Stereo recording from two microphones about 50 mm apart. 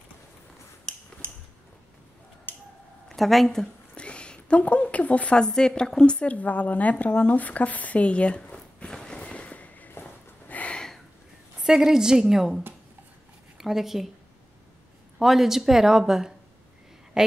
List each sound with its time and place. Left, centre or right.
2.5 s finger snapping: left
3.1 s a woman's voice: centre
3.9 s a sound: left
5.4 s a woman's voice: centre
9.1 s fireworks: left
10.5 s a sound: left
11.6 s a woman's voice: centre
15.1 s a woman's voice: centre